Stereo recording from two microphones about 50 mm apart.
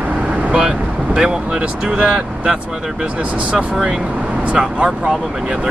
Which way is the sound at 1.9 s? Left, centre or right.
Right.